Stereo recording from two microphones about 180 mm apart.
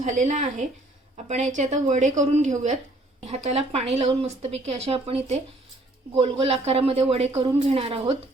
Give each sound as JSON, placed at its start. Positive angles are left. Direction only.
{"t": 0.0, "sound": "speech", "side_deg": -40}